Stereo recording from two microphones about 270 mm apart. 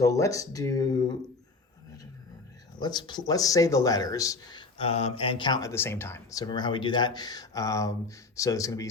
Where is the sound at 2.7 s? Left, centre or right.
Centre.